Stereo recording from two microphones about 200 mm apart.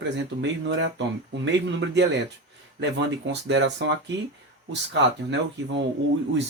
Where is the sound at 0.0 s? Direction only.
65° right (ahead or behind).